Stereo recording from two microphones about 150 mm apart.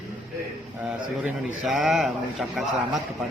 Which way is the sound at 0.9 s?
5° right (ahead or behind).